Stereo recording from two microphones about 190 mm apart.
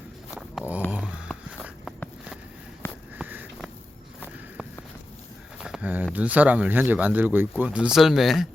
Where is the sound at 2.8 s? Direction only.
10° left (ahead or behind).